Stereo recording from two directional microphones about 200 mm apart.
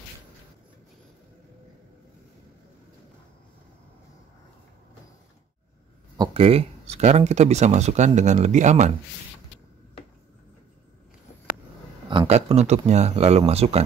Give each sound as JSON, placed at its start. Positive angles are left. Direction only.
{"t": 6.1, "sound": "speech", "side_deg": -25}
{"t": 12.1, "sound": "speech", "side_deg": -25}